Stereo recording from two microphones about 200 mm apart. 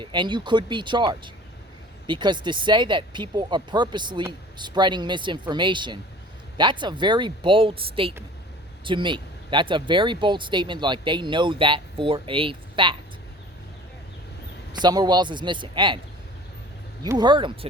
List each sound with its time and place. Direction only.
0.0 s speech: 25° right (ahead or behind)
14.7 s speech: 20° right (ahead or behind)
17.0 s speech: 20° right (ahead or behind)